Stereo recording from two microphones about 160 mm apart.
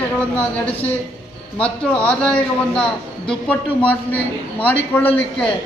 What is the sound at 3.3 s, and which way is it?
A man's voice, 10° left (ahead or behind).